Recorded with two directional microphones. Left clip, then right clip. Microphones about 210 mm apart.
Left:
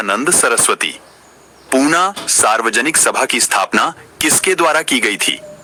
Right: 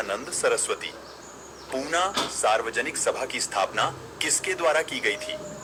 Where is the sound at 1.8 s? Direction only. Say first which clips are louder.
Left 10 dB; 65° left (ahead or behind).